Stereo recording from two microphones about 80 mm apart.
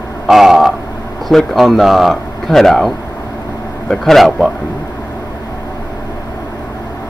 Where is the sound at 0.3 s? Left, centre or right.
Centre.